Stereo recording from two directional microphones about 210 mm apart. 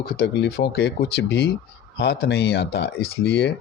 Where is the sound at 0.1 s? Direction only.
50° left (ahead or behind).